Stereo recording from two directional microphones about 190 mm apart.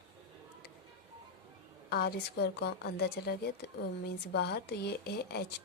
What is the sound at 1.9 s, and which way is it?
Speech, 55° left (ahead or behind).